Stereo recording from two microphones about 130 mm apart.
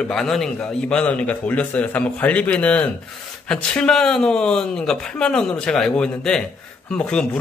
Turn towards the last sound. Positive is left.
turn(degrees=5)  # may be behind; listen again after turning